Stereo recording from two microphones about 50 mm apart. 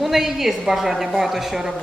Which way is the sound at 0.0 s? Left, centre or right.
Centre.